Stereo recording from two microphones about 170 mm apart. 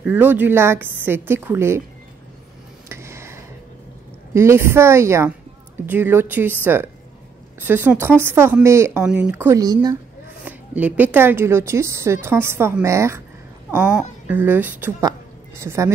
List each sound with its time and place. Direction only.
0.0 s a woman's voice: 10° right (ahead or behind)
2.9 s a sound: 15° right (ahead or behind)
4.3 s a woman's voice: 15° right (ahead or behind)
10.4 s a woman's voice: 10° right (ahead or behind)